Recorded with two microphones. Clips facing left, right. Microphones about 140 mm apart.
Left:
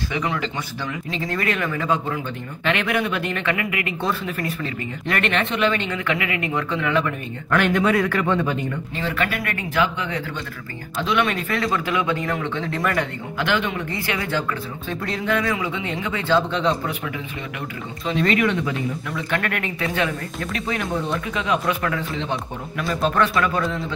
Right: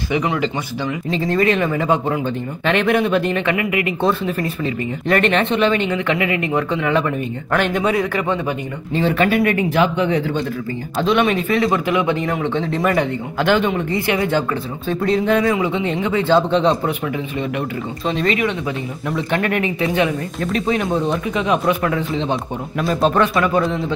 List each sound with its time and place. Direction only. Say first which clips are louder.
0.1 s speech: right 7 dB; 15° right (ahead or behind)
1.2 s speech: right 7 dB; 25° right (ahead or behind)
13.4 s speech: right 6 dB; 35° right (ahead or behind)
18.0 s speech: right 1 dB; 30° right (ahead or behind)